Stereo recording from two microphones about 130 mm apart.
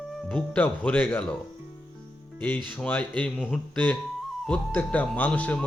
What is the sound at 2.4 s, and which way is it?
Speech, 15° left (ahead or behind).